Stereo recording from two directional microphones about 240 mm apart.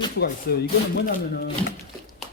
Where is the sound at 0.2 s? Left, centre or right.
Left.